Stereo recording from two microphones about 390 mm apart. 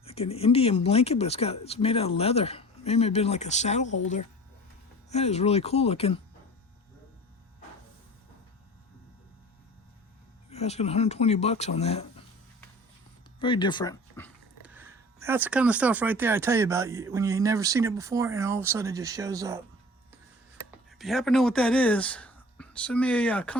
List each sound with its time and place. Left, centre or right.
0.0 s speech: centre
5.0 s speech: centre
10.5 s speech: centre
13.4 s speech: centre
14.6 s speech: centre
20.7 s speech: centre